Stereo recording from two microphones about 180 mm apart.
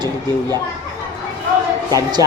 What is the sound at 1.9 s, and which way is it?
Speech, 20° right (ahead or behind).